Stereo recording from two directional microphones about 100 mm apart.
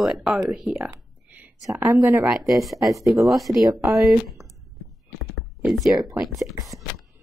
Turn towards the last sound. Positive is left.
turn(degrees=-30)  # may be behind; listen again after turning